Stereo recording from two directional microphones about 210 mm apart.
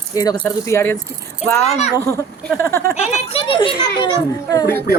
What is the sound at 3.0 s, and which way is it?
A child's voice, 25° left (ahead or behind).